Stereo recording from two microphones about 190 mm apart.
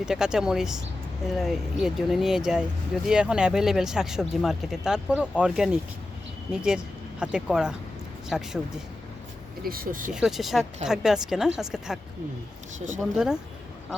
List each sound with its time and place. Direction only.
0.0 s speech: 5° right (ahead or behind)
9.6 s speech: 50° right (ahead or behind)
10.1 s speech: 5° right (ahead or behind)
13.0 s speech: 5° right (ahead or behind)